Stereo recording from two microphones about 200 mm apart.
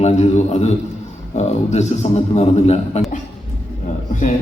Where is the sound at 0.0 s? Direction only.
30° left (ahead or behind).